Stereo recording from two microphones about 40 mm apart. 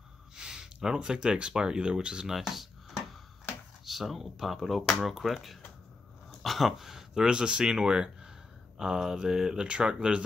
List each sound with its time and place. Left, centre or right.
0.4 s speech: centre
2.2 s speech: centre
3.8 s speech: centre; by 10.2 s right